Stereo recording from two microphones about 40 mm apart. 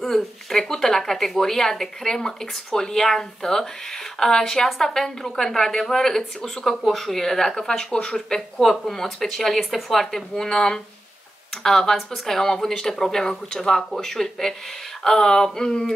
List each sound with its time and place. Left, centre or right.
0.0 s speech: centre
8.5 s speech: centre